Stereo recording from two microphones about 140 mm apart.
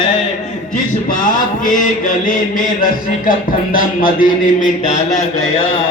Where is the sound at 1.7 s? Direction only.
75° left (ahead or behind).